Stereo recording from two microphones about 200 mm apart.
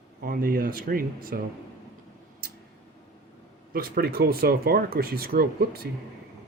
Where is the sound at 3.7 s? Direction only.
50° right (ahead or behind).